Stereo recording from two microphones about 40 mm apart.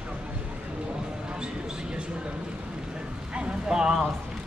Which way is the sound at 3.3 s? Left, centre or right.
Right.